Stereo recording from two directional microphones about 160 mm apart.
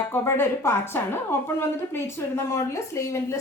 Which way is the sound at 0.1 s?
15° left (ahead or behind).